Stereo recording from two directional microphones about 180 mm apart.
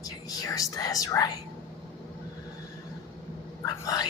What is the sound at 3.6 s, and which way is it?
Speech, 20° left (ahead or behind).